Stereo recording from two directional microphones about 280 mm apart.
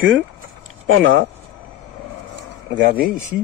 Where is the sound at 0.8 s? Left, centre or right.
Right.